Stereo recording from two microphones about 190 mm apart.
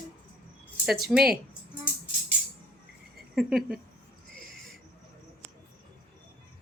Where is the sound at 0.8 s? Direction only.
Centre (ahead or behind).